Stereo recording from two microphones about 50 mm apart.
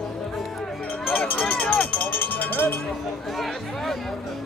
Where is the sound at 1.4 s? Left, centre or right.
Left.